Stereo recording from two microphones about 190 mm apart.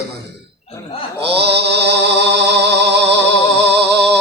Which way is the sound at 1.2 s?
60° right (ahead or behind).